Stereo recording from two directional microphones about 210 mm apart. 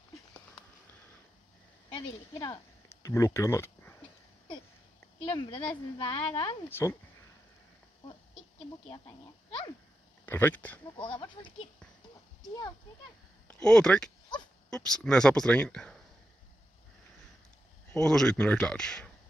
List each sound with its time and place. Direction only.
1.9 s speech: 20° left (ahead or behind)
5.2 s speech: 25° left (ahead or behind)
6.7 s speech: 10° left (ahead or behind)
8.8 s speech: 30° left (ahead or behind)
10.2 s speech: 10° left (ahead or behind)
11.0 s speech: 25° left (ahead or behind)
13.5 s speech: 5° left (ahead or behind)
17.9 s speech: 5° left (ahead or behind)